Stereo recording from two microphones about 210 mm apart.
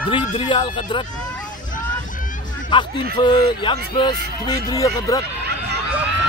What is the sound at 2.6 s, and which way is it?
Speech, 20° left (ahead or behind).